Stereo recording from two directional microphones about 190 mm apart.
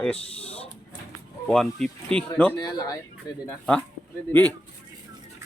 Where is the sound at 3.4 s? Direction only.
5° left (ahead or behind).